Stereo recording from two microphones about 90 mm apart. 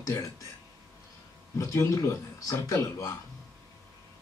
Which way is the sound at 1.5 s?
35° left (ahead or behind).